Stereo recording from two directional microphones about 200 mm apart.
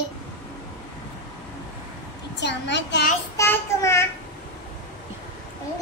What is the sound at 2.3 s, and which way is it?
Speech, 60° left (ahead or behind).